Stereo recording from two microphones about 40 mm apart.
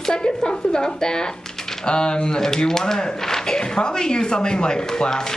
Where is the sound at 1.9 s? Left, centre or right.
Left.